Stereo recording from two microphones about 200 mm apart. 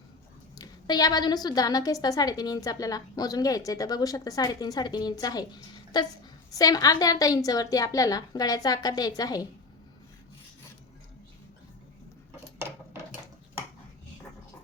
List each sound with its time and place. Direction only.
0.6 s a woman's voice: 20° left (ahead or behind)